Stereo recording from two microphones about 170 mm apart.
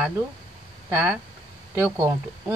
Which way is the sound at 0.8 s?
10° right (ahead or behind).